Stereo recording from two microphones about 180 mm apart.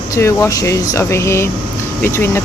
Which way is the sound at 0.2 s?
15° left (ahead or behind).